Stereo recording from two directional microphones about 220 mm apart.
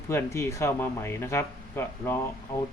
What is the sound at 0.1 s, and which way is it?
Speech, 10° left (ahead or behind).